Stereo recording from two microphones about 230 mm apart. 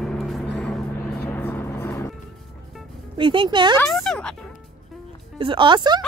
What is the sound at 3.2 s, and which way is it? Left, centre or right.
Speech, right.